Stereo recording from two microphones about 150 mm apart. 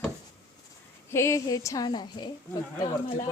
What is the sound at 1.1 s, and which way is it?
A woman's voice, 20° left (ahead or behind).